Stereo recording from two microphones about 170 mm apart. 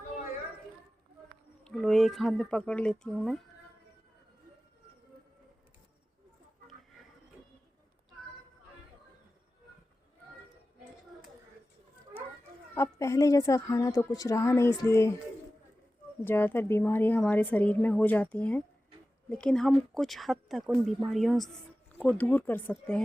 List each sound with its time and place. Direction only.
1.6 s speech: centre (ahead or behind)
12.7 s a woman's voice: 15° left (ahead or behind)
16.2 s a woman's voice: 15° left (ahead or behind)